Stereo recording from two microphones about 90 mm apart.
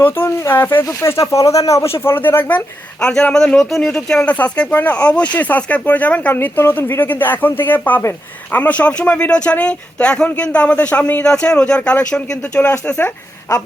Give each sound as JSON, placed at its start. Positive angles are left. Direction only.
{"t": 0.0, "sound": "speech", "side_deg": 25}
{"t": 3.0, "sound": "speech", "side_deg": 10}
{"t": 11.8, "sound": "speech", "side_deg": 20}
{"t": 13.5, "sound": "a man's voice", "side_deg": 45}